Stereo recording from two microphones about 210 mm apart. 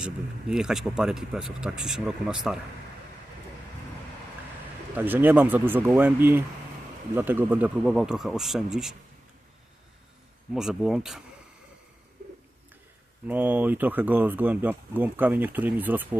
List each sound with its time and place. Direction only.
0.5 s speech: centre (ahead or behind)
4.9 s speech: 10° right (ahead or behind)
10.5 s speech: centre (ahead or behind)
13.2 s speech: 10° right (ahead or behind)